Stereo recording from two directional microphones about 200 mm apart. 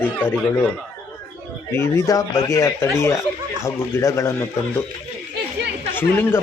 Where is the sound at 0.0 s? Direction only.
10° left (ahead or behind).